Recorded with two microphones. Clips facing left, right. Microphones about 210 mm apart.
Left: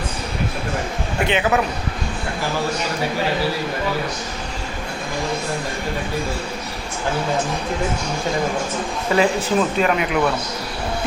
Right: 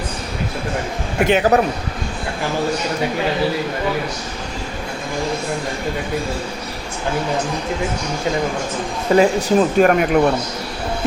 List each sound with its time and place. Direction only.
1.3 s a man's voice: 40° right (ahead or behind)
9.1 s speech: 45° right (ahead or behind)